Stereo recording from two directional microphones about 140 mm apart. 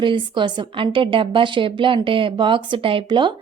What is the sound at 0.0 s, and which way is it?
A woman's voice, 35° right (ahead or behind).